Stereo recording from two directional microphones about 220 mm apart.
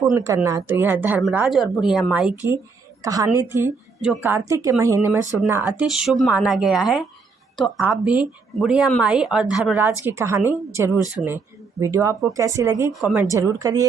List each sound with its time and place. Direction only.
0.0 s a woman's voice: 15° right (ahead or behind)
12.9 s speech: centre (ahead or behind)
13.3 s speech: 15° right (ahead or behind)